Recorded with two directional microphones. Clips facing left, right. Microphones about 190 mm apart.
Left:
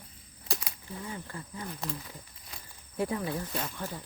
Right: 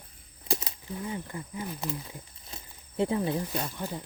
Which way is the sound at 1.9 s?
20° right (ahead or behind).